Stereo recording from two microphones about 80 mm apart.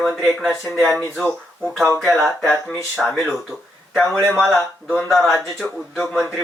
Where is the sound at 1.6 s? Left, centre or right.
Centre.